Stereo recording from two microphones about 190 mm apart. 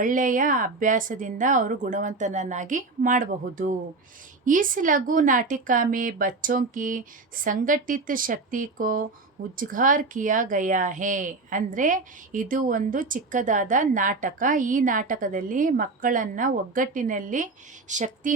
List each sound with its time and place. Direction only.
0.0 s speech: 45° right (ahead or behind)